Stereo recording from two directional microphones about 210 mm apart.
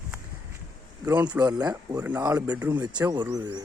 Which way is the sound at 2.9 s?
20° right (ahead or behind).